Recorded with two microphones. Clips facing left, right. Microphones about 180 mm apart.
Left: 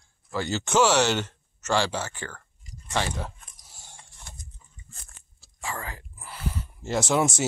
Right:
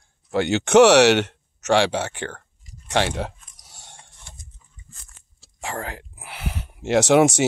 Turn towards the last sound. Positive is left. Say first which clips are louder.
# right 8 dB
turn(degrees=-75)  # may be behind; listen again after turning